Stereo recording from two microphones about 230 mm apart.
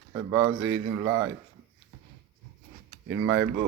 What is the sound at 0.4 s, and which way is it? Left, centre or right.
Speech, right.